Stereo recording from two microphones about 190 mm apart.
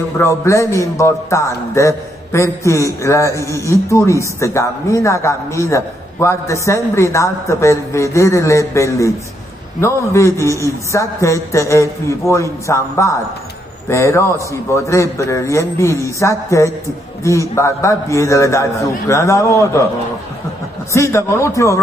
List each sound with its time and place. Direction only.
0.2 s a man's voice: 15° left (ahead or behind)
20.9 s a man's voice: 15° left (ahead or behind)